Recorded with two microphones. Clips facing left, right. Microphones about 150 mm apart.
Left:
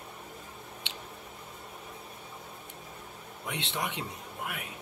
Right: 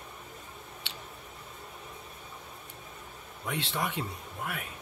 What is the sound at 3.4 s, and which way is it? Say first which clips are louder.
Speech: right 2 dB; 20° left (ahead or behind).